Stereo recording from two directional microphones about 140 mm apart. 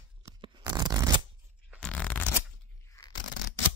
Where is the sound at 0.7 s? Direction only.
30° right (ahead or behind).